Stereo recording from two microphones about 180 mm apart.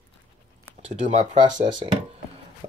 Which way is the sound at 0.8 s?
40° right (ahead or behind).